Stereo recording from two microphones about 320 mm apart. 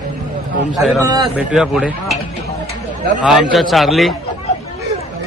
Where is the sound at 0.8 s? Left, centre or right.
Centre.